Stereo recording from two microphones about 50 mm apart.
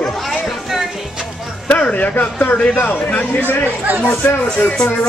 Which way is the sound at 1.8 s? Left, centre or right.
Left.